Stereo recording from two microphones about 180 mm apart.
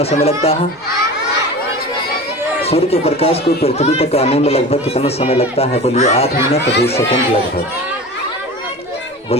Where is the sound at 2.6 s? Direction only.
35° left (ahead or behind).